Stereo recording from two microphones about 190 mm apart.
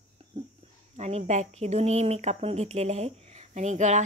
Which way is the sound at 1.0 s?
35° right (ahead or behind).